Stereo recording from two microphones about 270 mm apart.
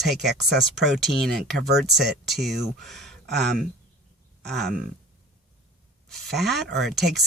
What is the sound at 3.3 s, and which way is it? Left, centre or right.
Speech, right.